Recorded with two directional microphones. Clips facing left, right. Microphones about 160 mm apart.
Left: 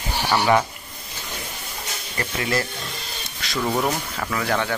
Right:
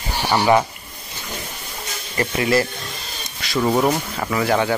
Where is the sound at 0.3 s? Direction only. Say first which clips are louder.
Right 3 dB; 15° right (ahead or behind).